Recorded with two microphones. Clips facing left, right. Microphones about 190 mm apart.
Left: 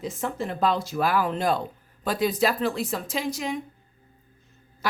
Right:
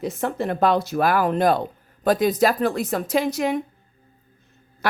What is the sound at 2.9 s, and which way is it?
Speech, 60° right (ahead or behind).